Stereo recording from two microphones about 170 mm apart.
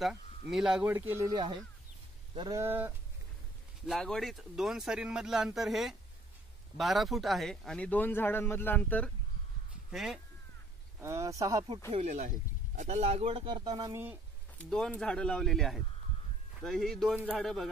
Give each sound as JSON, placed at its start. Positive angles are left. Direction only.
{"t": 0.5, "sound": "speech", "side_deg": -5}
{"t": 0.8, "sound": "speech", "side_deg": -15}
{"t": 3.8, "sound": "a man's voice", "side_deg": 0}
{"t": 9.8, "sound": "speech", "side_deg": 0}
{"t": 11.0, "sound": "speech", "side_deg": -20}
{"t": 11.9, "sound": "speech", "side_deg": -45}
{"t": 14.6, "sound": "speech", "side_deg": 5}